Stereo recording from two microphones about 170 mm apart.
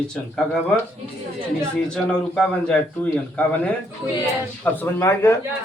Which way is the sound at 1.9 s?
5° left (ahead or behind).